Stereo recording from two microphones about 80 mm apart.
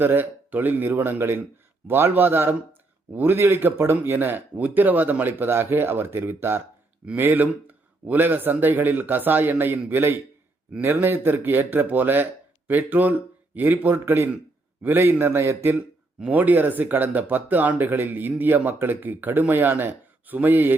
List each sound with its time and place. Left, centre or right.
0.0 s speech: right